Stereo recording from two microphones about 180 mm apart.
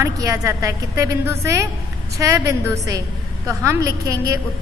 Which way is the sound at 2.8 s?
20° right (ahead or behind).